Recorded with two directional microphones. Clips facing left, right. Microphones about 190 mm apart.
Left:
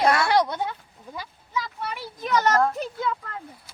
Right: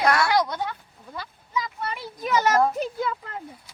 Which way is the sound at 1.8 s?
5° left (ahead or behind).